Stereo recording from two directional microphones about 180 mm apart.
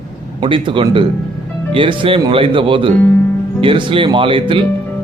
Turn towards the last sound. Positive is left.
turn(degrees=-30)  # may be behind; listen again after turning